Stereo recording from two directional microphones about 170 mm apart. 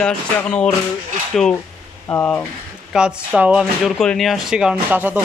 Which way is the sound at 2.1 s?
10° left (ahead or behind).